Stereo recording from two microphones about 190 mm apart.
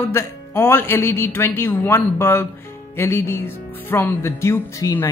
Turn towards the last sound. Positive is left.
turn(degrees=15)  # may be behind; listen again after turning